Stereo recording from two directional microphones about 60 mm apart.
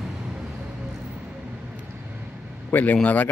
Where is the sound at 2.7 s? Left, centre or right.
Left.